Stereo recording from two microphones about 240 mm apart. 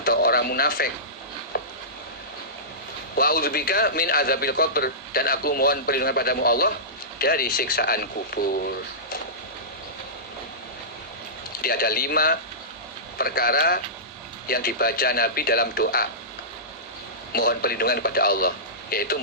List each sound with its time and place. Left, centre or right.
0.0 s radio: left
1.5 s a sound: left
3.2 s a man's voice: left
11.6 s a man's voice: left
17.3 s a man's voice: left